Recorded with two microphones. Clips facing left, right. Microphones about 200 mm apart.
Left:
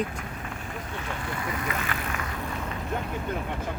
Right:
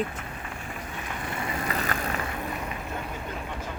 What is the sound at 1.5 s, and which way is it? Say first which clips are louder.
Vehicle: right 1 dB; 35° right (ahead or behind).